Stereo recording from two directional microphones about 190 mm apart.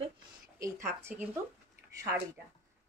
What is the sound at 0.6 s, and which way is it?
Speech, 15° right (ahead or behind).